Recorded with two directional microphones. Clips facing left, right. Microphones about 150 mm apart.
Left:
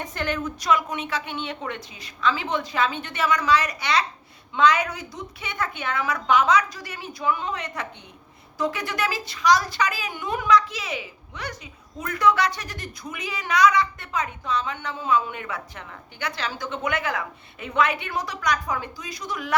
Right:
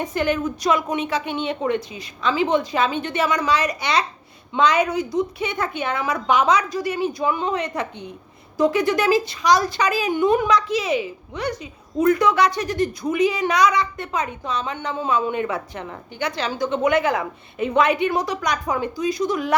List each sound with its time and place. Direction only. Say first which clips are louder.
0.0 s speech: right 6 dB; 10° right (ahead or behind)